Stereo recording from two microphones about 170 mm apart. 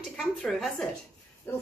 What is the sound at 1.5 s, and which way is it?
Speech, 15° left (ahead or behind).